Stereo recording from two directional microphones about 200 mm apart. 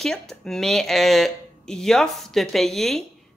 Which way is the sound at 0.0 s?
Centre (ahead or behind).